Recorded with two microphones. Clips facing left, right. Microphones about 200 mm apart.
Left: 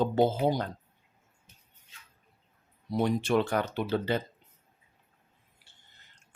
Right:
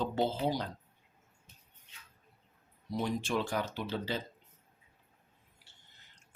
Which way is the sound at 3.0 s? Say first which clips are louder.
Left 7 dB; 65° left (ahead or behind).